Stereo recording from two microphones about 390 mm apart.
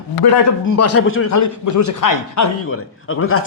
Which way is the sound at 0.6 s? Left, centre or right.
Left.